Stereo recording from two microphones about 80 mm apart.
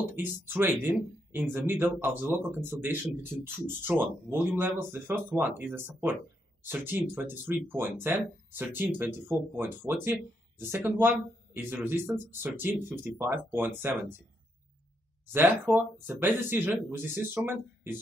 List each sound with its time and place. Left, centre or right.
0.1 s speech: right
15.3 s speech: right